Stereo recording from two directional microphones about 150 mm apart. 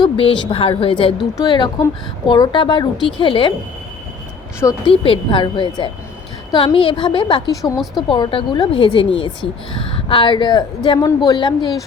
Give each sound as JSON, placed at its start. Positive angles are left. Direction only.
{"t": 0.0, "sound": "a woman's voice", "side_deg": 35}
{"t": 4.9, "sound": "a woman's voice", "side_deg": 35}
{"t": 8.1, "sound": "a woman's voice", "side_deg": 35}